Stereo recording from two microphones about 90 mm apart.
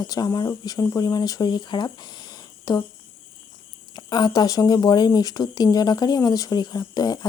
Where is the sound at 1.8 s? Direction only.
50° left (ahead or behind).